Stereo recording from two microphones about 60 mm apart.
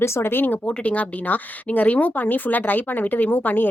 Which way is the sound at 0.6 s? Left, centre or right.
Left.